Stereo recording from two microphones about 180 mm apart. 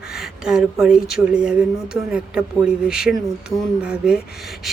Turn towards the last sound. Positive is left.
turn(degrees=-5)  # may be behind; listen again after turning